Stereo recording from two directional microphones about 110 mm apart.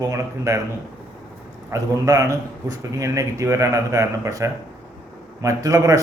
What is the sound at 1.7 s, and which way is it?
A man's voice, 30° right (ahead or behind).